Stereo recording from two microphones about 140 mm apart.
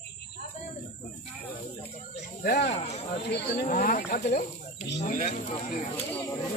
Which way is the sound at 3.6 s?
80° left.